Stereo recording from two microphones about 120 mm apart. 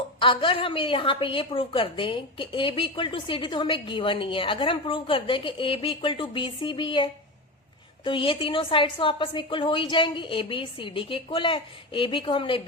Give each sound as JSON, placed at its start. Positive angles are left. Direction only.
{"t": 0.2, "sound": "a woman's voice", "side_deg": 45}